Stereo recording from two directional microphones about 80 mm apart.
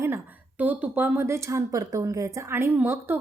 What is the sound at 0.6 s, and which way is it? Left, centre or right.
A woman's voice, right.